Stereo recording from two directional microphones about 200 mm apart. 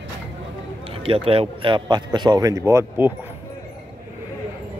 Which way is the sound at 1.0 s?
30° right (ahead or behind).